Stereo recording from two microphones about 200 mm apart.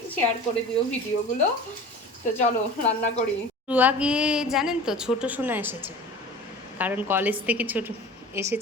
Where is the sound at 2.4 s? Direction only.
35° left (ahead or behind).